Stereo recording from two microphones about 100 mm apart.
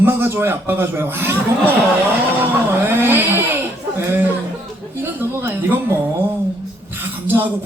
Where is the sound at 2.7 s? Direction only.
20° right (ahead or behind).